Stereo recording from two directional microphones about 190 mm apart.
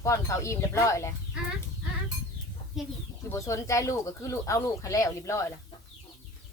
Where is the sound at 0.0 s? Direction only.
15° left (ahead or behind).